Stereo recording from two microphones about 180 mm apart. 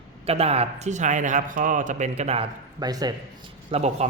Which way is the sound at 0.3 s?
35° right (ahead or behind).